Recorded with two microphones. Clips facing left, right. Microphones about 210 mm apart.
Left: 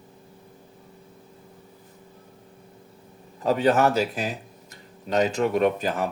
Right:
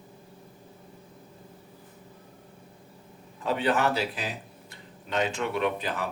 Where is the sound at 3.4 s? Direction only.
40° left (ahead or behind).